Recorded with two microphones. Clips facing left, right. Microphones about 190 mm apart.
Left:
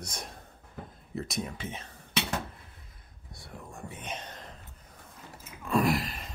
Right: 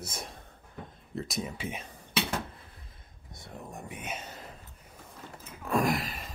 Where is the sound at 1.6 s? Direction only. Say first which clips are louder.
Right 2 dB; 10° right (ahead or behind).